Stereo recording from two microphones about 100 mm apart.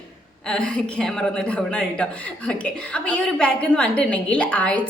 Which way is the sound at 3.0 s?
10° left (ahead or behind).